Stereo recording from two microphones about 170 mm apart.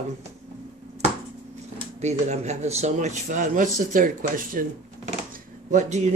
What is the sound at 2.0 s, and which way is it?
A man's voice, 40° right (ahead or behind).